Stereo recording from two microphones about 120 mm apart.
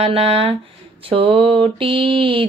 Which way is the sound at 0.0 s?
55° right (ahead or behind).